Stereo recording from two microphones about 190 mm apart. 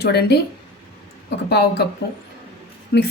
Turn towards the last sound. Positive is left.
turn(degrees=60)  # may be behind; listen again after turning